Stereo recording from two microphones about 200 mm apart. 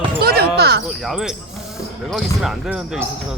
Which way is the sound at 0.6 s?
55° right (ahead or behind).